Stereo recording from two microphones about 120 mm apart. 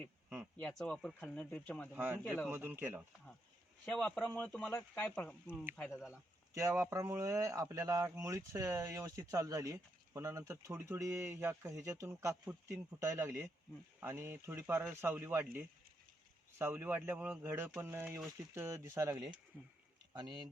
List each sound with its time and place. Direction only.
0.6 s speech: 5° left (ahead or behind)
2.0 s a man's voice: 15° right (ahead or behind)
3.8 s speech: 10° left (ahead or behind)
5.9 s speech: centre (ahead or behind)
6.5 s a man's voice: 25° right (ahead or behind)
20.1 s speech: 35° right (ahead or behind)